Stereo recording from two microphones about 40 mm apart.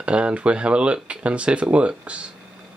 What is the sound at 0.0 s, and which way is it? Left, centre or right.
Speech, right.